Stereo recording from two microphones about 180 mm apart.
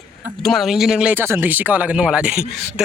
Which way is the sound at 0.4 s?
Centre (ahead or behind).